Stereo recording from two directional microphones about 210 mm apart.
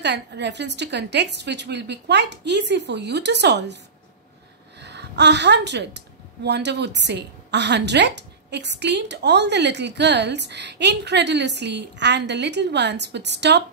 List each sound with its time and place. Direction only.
0.0 s a woman's voice: 55° right (ahead or behind)